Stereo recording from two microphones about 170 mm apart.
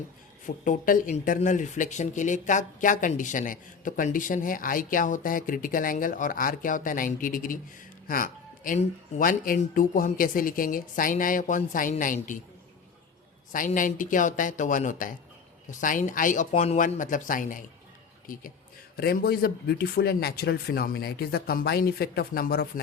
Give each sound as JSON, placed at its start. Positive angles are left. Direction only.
{"t": 0.4, "sound": "speech", "side_deg": 50}
{"t": 13.5, "sound": "speech", "side_deg": 50}
{"t": 18.9, "sound": "speech", "side_deg": 65}